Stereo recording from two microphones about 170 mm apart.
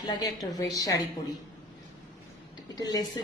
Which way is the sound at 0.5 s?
20° left (ahead or behind).